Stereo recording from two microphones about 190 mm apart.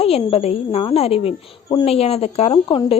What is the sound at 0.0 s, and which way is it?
A woman's voice, 30° left (ahead or behind).